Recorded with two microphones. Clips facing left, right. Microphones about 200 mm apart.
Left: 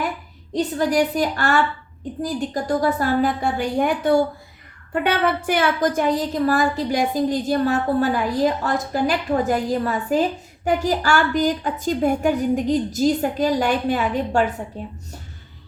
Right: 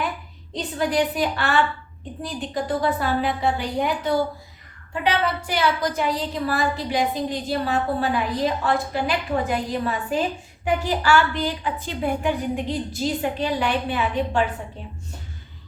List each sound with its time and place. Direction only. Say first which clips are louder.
0.5 s a woman's voice: left 4 dB; 45° left (ahead or behind)